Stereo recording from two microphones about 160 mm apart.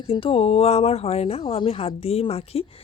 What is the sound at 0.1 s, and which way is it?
A woman's voice, 35° left (ahead or behind).